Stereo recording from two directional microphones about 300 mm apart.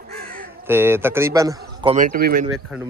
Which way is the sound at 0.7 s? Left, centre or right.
Centre.